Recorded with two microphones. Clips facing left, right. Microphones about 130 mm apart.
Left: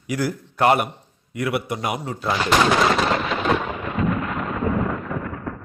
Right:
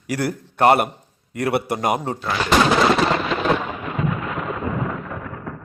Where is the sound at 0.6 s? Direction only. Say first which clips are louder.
Right 2 dB; 35° right (ahead or behind).